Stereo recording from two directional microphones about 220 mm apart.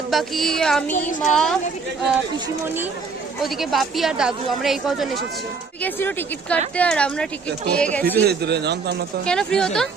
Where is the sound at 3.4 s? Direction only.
Centre (ahead or behind).